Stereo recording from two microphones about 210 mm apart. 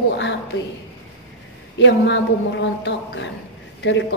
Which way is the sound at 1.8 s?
60° left (ahead or behind).